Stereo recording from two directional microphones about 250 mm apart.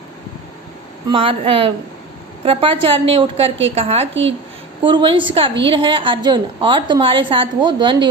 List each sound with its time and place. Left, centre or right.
1.0 s a woman's voice: right